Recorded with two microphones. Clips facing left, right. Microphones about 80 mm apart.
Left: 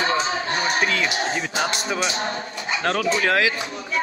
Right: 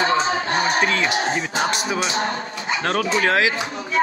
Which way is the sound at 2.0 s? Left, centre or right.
Right.